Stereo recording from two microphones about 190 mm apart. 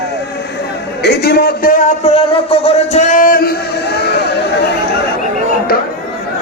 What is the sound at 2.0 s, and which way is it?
Music, 30° left (ahead or behind).